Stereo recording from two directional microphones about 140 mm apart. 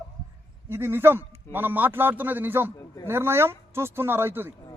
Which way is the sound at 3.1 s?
15° right (ahead or behind).